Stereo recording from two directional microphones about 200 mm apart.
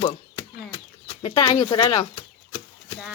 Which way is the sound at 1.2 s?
30° left (ahead or behind).